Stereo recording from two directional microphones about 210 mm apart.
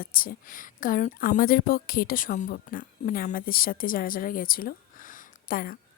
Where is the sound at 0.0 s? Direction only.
45° left (ahead or behind).